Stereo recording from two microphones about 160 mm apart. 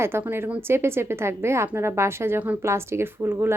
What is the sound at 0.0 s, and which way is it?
A woman's voice, 15° right (ahead or behind).